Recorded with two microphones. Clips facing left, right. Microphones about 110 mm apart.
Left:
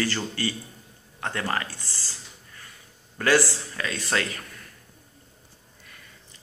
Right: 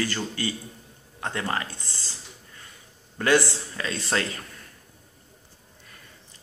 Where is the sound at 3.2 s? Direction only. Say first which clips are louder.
Even; 20° right (ahead or behind).